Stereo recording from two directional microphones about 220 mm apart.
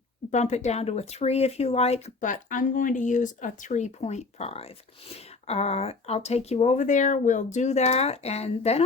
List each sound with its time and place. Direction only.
0.3 s speech: 30° left (ahead or behind)